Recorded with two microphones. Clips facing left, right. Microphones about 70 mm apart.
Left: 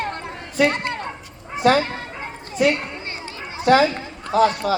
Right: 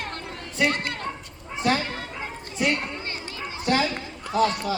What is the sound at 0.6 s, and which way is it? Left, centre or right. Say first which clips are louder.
Speech: left 4 dB; left.